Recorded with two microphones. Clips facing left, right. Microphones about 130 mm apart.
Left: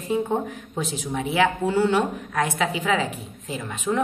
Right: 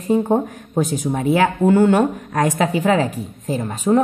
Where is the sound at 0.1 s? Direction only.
45° right (ahead or behind).